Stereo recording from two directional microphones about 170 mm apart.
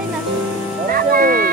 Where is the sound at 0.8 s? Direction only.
60° right (ahead or behind).